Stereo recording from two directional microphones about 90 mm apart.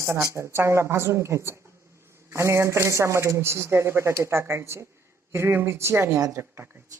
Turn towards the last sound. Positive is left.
turn(degrees=-30)  # may be behind; listen again after turning